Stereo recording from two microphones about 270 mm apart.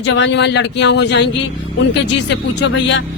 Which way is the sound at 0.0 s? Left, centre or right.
Left.